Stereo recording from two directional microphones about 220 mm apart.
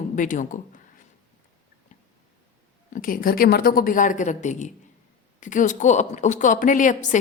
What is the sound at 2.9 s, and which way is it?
A woman's voice, 40° left (ahead or behind).